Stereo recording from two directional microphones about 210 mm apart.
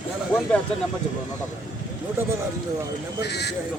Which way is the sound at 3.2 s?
50° left (ahead or behind).